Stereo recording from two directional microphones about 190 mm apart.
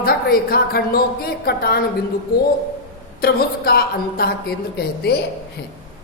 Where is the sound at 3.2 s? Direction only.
55° left (ahead or behind).